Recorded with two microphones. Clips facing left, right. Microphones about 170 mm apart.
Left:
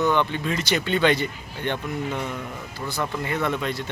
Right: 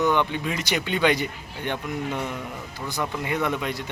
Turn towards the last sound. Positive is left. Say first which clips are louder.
# even
turn(degrees=-15)  # may be behind; listen again after turning